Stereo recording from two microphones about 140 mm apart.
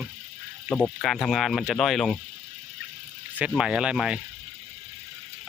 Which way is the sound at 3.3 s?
5° right (ahead or behind).